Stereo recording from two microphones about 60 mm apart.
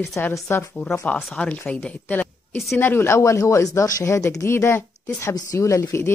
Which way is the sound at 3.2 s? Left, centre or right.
Left.